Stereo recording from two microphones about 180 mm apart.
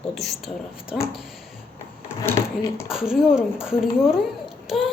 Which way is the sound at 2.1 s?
15° left (ahead or behind).